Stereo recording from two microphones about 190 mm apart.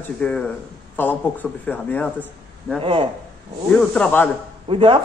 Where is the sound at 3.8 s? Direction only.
10° left (ahead or behind).